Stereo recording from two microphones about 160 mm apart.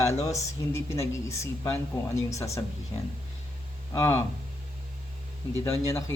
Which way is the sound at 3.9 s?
15° left (ahead or behind).